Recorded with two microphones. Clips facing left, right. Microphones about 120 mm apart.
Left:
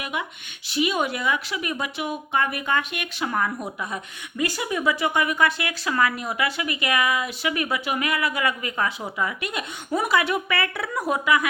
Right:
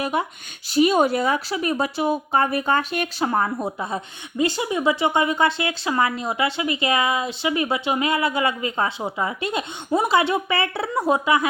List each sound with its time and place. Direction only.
0.0 s speech: 35° right (ahead or behind)